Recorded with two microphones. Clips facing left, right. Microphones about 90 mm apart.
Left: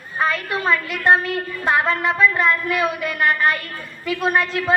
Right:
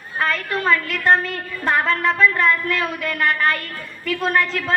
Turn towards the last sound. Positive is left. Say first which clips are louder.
# left 1 dB
turn(degrees=15)  # may be behind; listen again after turning